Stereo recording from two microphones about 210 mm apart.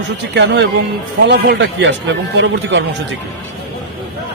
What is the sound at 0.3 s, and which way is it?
Speech, 55° right (ahead or behind).